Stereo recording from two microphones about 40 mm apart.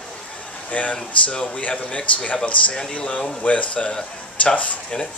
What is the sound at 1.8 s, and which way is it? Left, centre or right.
Speech, left.